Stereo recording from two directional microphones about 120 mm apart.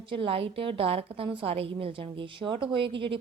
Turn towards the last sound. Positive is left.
turn(degrees=-45)  # may be behind; listen again after turning